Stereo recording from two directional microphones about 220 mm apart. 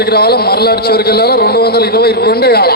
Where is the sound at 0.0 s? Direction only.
45° left (ahead or behind).